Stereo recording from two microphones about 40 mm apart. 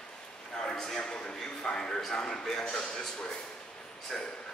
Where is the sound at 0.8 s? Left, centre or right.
Centre.